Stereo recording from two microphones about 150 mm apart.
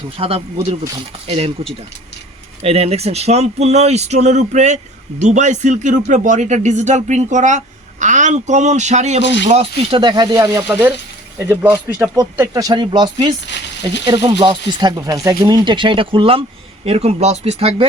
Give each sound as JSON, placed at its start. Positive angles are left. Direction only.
{"t": 0.2, "sound": "speech", "side_deg": -40}
{"t": 2.6, "sound": "speech", "side_deg": -40}